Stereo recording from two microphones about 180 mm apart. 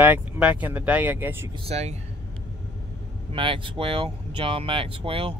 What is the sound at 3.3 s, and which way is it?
Speech, 30° right (ahead or behind).